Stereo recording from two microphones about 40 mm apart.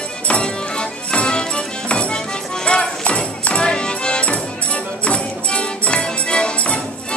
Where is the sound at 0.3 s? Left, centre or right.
Left.